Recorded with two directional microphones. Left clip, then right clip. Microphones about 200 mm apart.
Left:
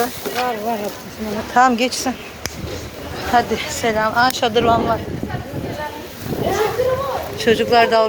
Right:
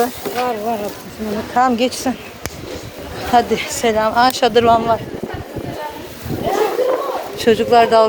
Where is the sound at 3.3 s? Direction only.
35° right (ahead or behind).